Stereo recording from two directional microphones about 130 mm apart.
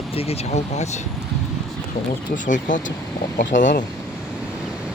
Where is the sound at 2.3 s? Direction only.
80° left.